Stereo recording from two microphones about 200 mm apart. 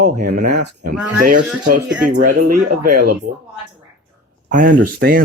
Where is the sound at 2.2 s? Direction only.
45° right (ahead or behind).